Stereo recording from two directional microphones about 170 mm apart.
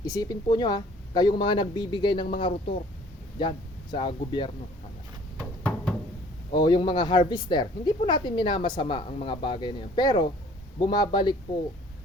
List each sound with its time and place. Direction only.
0.0 s speech: 20° left (ahead or behind)
3.9 s speech: 30° left (ahead or behind)
5.4 s a sound: 5° left (ahead or behind)
6.5 s speech: 25° left (ahead or behind)